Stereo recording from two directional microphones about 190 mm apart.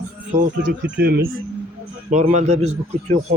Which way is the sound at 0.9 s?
60° right (ahead or behind).